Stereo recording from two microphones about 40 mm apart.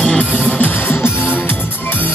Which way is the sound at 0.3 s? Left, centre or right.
Right.